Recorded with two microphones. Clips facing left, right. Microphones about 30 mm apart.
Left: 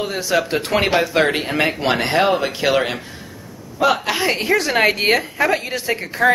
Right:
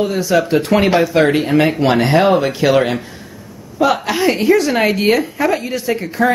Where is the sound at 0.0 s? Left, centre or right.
Centre.